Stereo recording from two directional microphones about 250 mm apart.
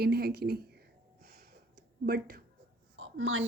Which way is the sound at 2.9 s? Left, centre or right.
Right.